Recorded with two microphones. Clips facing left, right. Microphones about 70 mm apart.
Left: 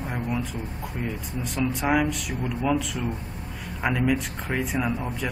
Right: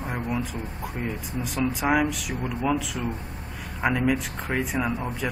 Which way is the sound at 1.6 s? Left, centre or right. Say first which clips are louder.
Even; centre.